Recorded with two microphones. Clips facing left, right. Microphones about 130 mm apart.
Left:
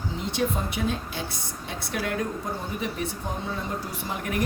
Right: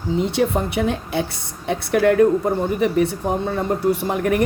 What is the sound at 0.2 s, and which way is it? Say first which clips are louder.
A woman's voice: right 7 dB; 65° right (ahead or behind).